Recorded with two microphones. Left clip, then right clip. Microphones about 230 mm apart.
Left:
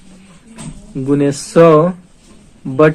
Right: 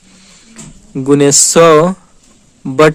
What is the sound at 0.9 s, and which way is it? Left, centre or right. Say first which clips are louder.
Speech: right 6 dB; right.